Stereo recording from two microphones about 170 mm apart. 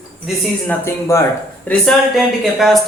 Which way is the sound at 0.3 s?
Centre (ahead or behind).